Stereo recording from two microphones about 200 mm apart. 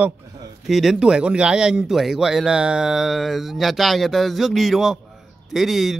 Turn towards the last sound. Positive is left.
turn(degrees=0)  # may be behind; listen again after turning